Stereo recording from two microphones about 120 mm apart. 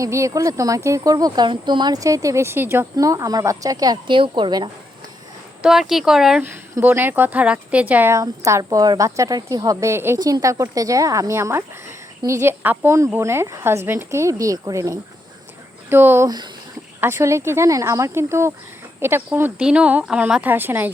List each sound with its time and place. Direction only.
0.0 s speech: 25° right (ahead or behind)
4.0 s speech: 45° right (ahead or behind)
5.9 s speech: 5° right (ahead or behind)
6.4 s speech: 20° right (ahead or behind)
8.1 s speech: 25° right (ahead or behind)
10.2 s speech: 30° right (ahead or behind)